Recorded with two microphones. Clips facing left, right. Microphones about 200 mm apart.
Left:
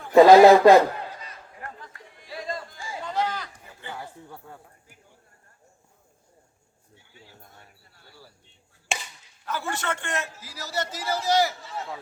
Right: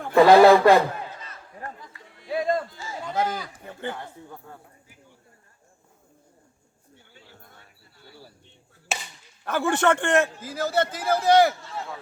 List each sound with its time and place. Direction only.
0.1 s speech: 20° left (ahead or behind)
2.2 s music: 55° right (ahead or behind)
3.3 s a sound: 10° right (ahead or behind)
3.6 s a sound: 60° right (ahead or behind)
3.9 s speech: 5° left (ahead or behind)
8.9 s chop: 5° right (ahead or behind)
9.4 s a man's voice: 55° right (ahead or behind)
11.6 s speech: centre (ahead or behind)